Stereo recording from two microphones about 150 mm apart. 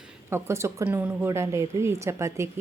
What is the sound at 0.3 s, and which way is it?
Speech, 15° right (ahead or behind).